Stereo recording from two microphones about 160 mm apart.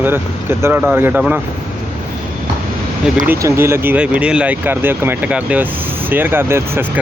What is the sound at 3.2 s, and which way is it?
Speech, 15° right (ahead or behind).